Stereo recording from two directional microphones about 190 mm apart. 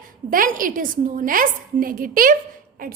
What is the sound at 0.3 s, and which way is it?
A woman's voice, 45° right (ahead or behind).